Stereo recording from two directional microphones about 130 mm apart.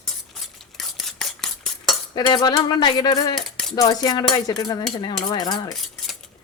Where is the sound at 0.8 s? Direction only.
Centre (ahead or behind).